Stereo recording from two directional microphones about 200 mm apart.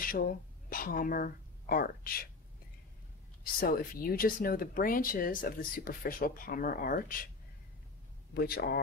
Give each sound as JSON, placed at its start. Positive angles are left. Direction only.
{"t": 0.0, "sound": "speech", "side_deg": 45}
{"t": 3.5, "sound": "speech", "side_deg": 45}
{"t": 8.4, "sound": "speech", "side_deg": 50}